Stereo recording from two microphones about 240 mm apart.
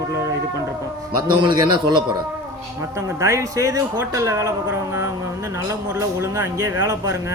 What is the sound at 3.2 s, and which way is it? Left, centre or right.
Speech, centre.